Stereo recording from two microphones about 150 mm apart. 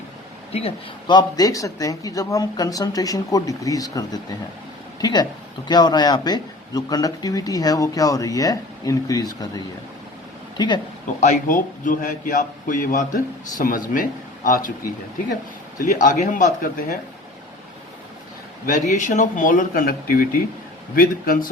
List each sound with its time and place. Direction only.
0.5 s speech: 35° left (ahead or behind)
11.2 s a man's voice: 55° left (ahead or behind)
15.8 s a man's voice: 55° left (ahead or behind)
18.6 s a man's voice: 55° left (ahead or behind)